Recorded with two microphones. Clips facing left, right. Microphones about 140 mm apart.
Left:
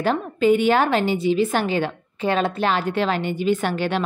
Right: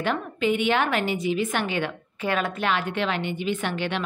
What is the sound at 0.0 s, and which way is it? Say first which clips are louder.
A woman's voice: left 5 dB; 40° left (ahead or behind).